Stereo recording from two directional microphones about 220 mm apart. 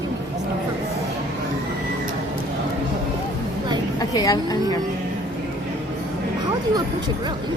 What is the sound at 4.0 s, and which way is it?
Speech, 15° left (ahead or behind).